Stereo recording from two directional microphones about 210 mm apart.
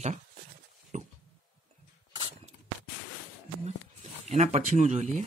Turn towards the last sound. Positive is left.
turn(degrees=-35)  # may be behind; listen again after turning